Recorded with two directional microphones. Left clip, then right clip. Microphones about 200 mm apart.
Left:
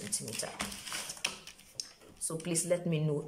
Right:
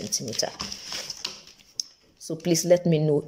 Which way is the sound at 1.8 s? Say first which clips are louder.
Right 10 dB; 30° right (ahead or behind).